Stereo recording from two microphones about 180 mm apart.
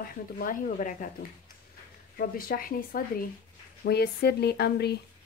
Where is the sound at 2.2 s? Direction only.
55° left (ahead or behind).